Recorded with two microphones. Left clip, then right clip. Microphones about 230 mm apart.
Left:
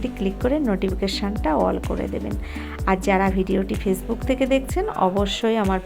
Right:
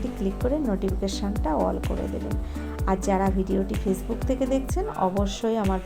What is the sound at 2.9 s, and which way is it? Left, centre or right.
A woman's voice, left.